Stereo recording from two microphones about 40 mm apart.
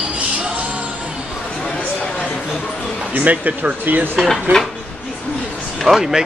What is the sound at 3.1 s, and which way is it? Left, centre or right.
Speech, right.